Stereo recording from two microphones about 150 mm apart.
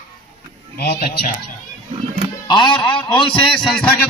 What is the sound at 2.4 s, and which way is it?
A man's voice, 30° left (ahead or behind).